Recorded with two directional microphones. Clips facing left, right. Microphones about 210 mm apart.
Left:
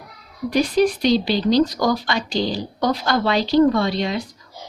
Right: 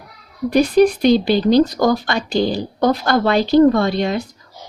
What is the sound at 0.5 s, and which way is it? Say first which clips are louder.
Speech: right 5 dB; 50° right (ahead or behind).